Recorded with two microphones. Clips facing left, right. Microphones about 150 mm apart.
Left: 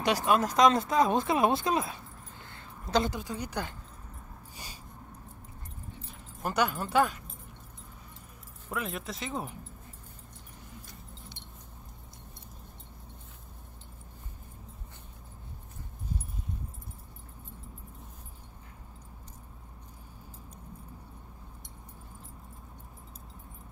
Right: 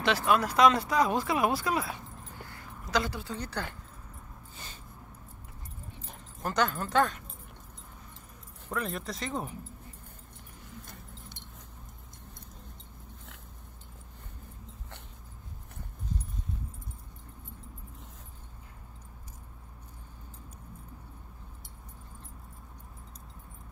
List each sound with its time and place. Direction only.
0.0 s speech: 15° left (ahead or behind)
6.4 s speech: 10° left (ahead or behind)
8.6 s speech: 5° left (ahead or behind)
10.9 s keys jangling: 50° right (ahead or behind)